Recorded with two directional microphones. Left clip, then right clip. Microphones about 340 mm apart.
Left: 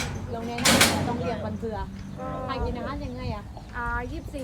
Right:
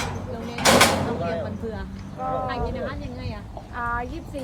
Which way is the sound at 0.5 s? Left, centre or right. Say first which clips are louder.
Right 4 dB; centre.